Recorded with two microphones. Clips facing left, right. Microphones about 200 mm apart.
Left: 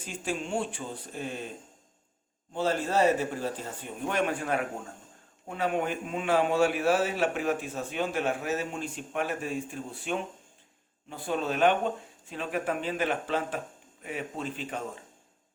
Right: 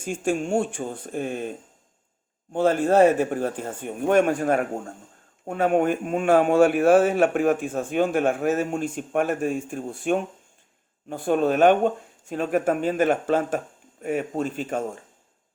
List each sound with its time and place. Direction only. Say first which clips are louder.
0.0 s a man's voice: right 9 dB; 50° right (ahead or behind)